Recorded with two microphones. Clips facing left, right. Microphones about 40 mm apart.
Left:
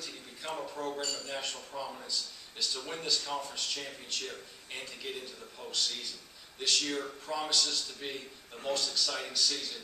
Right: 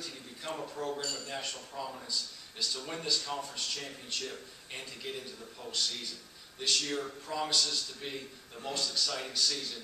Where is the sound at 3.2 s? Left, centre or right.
Centre.